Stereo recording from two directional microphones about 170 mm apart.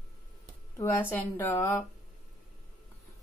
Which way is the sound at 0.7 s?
15° left (ahead or behind).